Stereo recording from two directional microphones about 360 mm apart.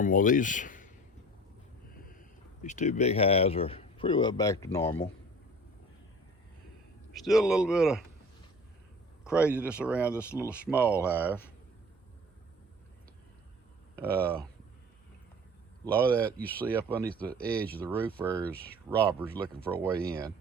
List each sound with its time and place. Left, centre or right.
0.0 s speech: left
2.6 s speech: centre
7.1 s speech: centre
9.2 s speech: centre
13.9 s speech: centre
15.9 s speech: centre
20.1 s speech: centre